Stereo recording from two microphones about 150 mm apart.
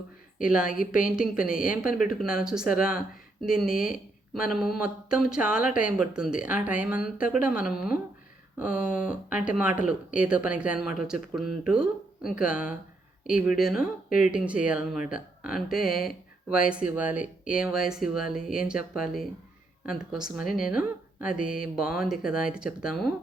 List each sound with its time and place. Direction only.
0.5 s speech: 5° right (ahead or behind)
1.5 s speech: 65° left (ahead or behind)
2.0 s speech: 5° right (ahead or behind)
3.7 s speech: 70° left (ahead or behind)
3.9 s speech: 5° right (ahead or behind)
20.4 s speech: 70° left (ahead or behind)
20.7 s speech: 5° right (ahead or behind)